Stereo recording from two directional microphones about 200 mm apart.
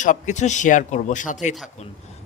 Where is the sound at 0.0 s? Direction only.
40° left (ahead or behind).